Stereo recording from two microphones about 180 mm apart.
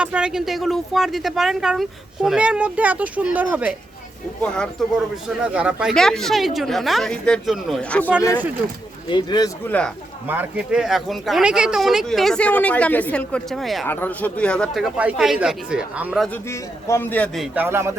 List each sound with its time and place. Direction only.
0.0 s speech: 5° right (ahead or behind)
4.5 s speech: 5° left (ahead or behind)
5.4 s speech: 5° right (ahead or behind)
9.0 s speech: 25° left (ahead or behind)
9.6 s a man's voice: 10° left (ahead or behind)
10.2 s speech: 10° right (ahead or behind)
13.8 s speech: 10° left (ahead or behind); by 16.3 s 5° right (ahead or behind)
16.5 s speech: 15° left (ahead or behind); by 17.9 s 15° right (ahead or behind)